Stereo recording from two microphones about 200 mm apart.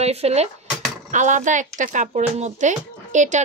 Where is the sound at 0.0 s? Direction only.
30° right (ahead or behind).